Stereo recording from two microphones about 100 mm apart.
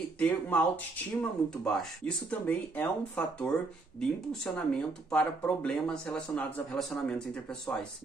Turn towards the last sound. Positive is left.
turn(degrees=10)  # may be behind; listen again after turning